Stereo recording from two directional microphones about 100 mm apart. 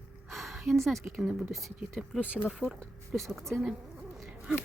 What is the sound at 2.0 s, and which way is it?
Speech, 10° right (ahead or behind).